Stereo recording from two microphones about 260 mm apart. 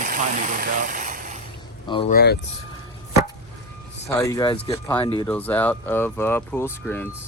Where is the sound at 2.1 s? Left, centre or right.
Left.